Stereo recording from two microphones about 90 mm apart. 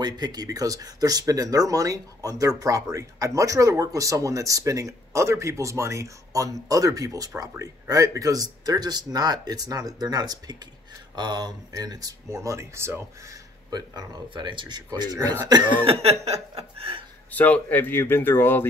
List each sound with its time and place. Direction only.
0.0 s speech: 50° right (ahead or behind); by 13.4 s 30° right (ahead or behind)
13.7 s speech: 50° right (ahead or behind)
16.5 s chuckle: 90° right
17.3 s speech: 15° left (ahead or behind)